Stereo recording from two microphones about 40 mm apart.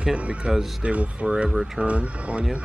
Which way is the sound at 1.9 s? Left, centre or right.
Right.